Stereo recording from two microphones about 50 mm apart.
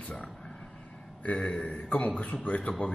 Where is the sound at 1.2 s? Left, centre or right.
Left.